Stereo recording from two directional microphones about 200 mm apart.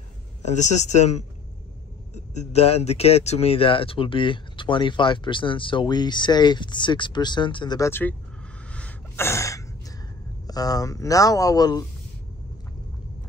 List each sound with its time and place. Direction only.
0.4 s speech: 35° left (ahead or behind); by 8.2 s 10° left (ahead or behind)
8.7 s gasp: 10° left (ahead or behind)
10.4 s speech: 20° left (ahead or behind)